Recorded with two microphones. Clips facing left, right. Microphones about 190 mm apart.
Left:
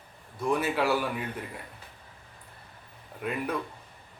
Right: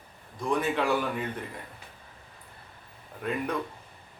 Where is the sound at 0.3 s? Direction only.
5° left (ahead or behind).